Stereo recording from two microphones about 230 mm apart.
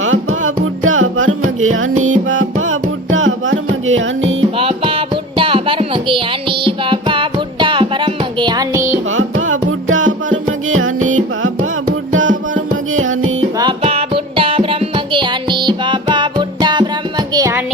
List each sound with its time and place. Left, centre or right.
0.0 s music: right
4.5 s music: right
9.0 s music: right
13.6 s music: right